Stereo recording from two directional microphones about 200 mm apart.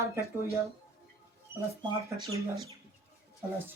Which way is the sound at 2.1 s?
20° right (ahead or behind).